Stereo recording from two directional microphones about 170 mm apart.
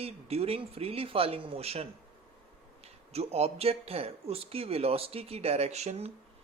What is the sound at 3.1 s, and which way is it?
Speech, 35° right (ahead or behind).